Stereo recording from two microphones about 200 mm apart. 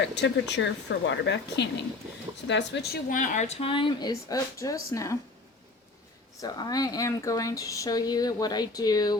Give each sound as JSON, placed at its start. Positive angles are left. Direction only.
{"t": 0.2, "sound": "speech", "side_deg": 60}
{"t": 3.1, "sound": "speech", "side_deg": 40}
{"t": 6.4, "sound": "speech", "side_deg": 20}